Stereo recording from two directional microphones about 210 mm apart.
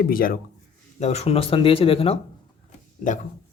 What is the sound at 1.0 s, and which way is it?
Speech, 30° left (ahead or behind).